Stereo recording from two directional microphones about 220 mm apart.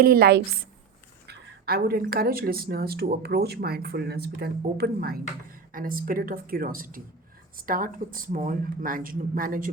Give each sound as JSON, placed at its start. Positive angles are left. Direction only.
{"t": 0.0, "sound": "speech", "side_deg": -45}